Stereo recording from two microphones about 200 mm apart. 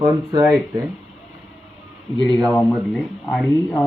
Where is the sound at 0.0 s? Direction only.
20° right (ahead or behind).